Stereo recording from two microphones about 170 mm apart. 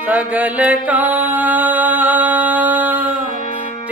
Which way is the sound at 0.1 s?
10° right (ahead or behind).